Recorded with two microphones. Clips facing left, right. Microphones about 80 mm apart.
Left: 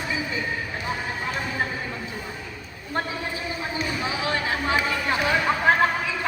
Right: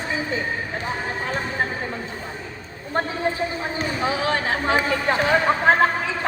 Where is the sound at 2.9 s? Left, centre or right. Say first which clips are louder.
Right 5 dB; right.